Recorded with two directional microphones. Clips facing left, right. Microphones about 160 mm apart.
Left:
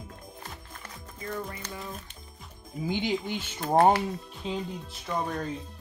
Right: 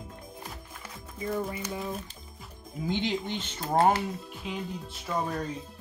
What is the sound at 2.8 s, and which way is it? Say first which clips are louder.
Speech: left 1 dB; 5° left (ahead or behind).